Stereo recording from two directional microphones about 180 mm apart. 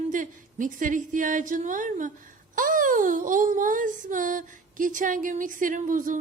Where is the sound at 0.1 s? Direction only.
45° right (ahead or behind).